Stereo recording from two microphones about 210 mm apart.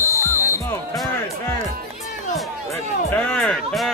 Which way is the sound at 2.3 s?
10° left (ahead or behind).